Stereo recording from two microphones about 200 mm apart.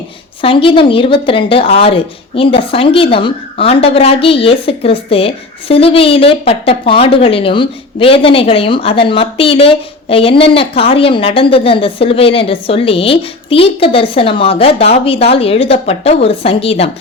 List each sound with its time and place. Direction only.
0.4 s speech: 25° left (ahead or behind)